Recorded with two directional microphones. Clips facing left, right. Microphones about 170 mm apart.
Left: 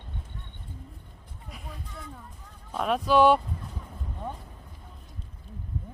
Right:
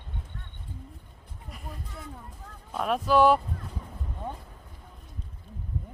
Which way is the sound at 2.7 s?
Centre (ahead or behind).